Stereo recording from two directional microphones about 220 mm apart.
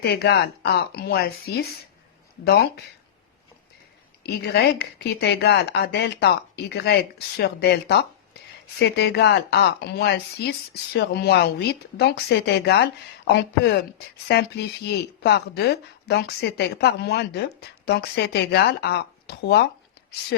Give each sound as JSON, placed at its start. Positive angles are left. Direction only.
{"t": 0.0, "sound": "speech", "side_deg": 50}
{"t": 4.2, "sound": "speech", "side_deg": 50}